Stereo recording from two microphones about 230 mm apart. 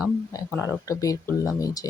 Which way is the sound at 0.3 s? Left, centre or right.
Centre.